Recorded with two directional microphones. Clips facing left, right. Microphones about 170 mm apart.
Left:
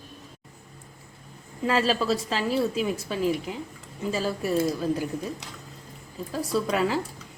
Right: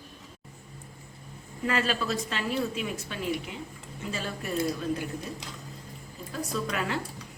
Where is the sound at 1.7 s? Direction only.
30° left (ahead or behind).